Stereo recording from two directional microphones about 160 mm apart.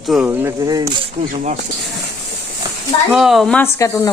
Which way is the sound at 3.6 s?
15° left (ahead or behind).